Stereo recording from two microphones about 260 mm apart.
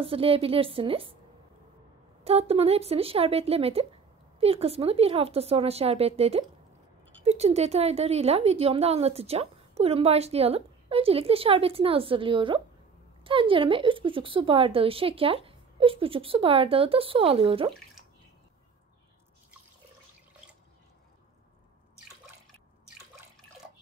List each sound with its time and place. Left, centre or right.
0.0 s a woman's voice: right
2.2 s a woman's voice: right